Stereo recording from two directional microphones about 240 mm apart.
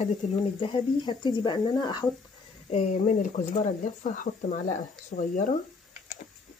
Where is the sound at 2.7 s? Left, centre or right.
Left.